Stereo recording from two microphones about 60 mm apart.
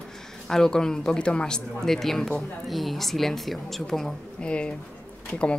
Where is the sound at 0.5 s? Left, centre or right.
Centre.